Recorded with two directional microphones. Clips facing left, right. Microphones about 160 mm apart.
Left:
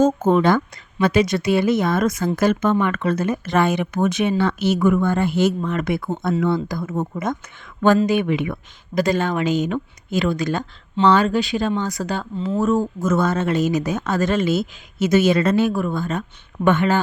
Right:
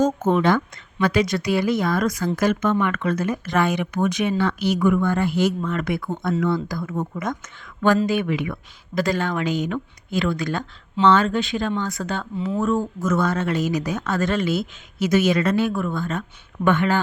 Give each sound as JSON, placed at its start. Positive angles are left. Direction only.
{"t": 0.3, "sound": "speech", "side_deg": 40}
{"t": 1.0, "sound": "speech", "side_deg": 20}
{"t": 12.7, "sound": "speech", "side_deg": 30}